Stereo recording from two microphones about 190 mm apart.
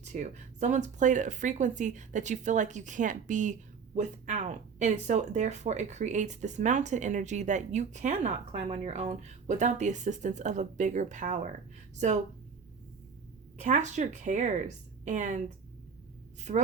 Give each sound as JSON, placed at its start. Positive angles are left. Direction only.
{"t": 0.0, "sound": "speech", "side_deg": -40}
{"t": 13.6, "sound": "speech", "side_deg": -40}